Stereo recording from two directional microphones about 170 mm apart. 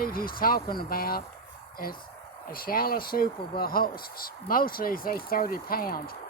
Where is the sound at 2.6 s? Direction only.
60° left (ahead or behind).